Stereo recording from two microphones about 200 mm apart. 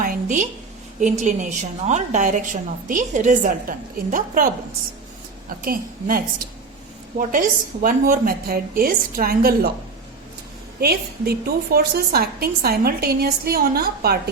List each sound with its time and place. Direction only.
0.0 s a sound: 40° right (ahead or behind)
0.9 s a woman's voice: 35° right (ahead or behind)
5.6 s a woman's voice: 45° right (ahead or behind)
10.8 s a woman's voice: 50° right (ahead or behind)